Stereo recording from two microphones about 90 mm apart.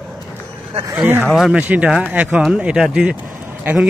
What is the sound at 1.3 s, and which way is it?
Speech, 5° right (ahead or behind).